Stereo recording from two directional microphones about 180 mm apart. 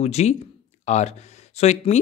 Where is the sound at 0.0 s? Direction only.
35° left (ahead or behind).